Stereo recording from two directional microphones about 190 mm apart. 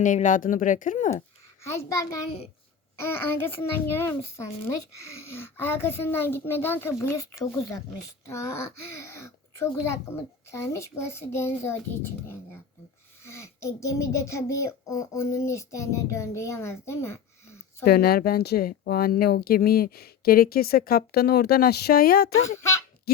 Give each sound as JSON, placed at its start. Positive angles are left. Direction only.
{"t": 0.0, "sound": "speech", "side_deg": 40}
{"t": 1.6, "sound": "a child's voice", "side_deg": 15}
{"t": 17.8, "sound": "speech", "side_deg": 55}
{"t": 22.4, "sound": "a child's voice", "side_deg": 15}